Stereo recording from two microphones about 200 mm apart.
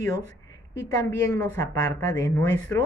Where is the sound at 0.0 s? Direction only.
15° left (ahead or behind).